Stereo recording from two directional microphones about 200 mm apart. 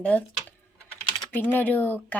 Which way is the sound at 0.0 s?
5° left (ahead or behind).